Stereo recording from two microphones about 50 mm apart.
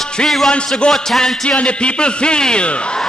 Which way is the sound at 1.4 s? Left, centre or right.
Left.